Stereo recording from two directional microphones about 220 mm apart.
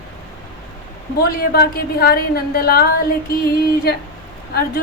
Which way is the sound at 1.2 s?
45° left (ahead or behind).